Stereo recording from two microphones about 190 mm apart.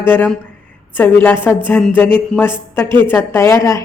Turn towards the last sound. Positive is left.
turn(degrees=15)  # may be behind; listen again after turning